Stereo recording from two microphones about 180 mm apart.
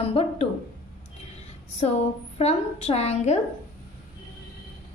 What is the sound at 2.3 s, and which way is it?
A woman's voice, 35° left (ahead or behind).